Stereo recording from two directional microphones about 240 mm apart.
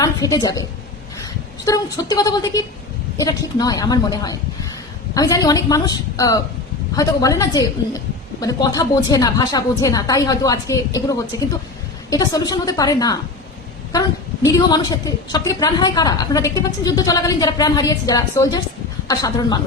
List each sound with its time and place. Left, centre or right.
0.0 s a woman's voice: centre
1.6 s a woman's voice: centre
14.4 s a woman's voice: centre